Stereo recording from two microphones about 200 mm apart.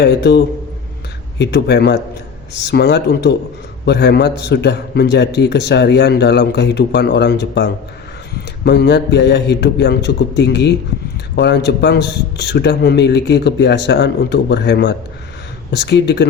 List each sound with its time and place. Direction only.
0.0 s a man's voice: 55° left (ahead or behind)